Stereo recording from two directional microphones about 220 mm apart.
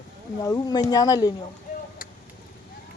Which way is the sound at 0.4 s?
15° left (ahead or behind).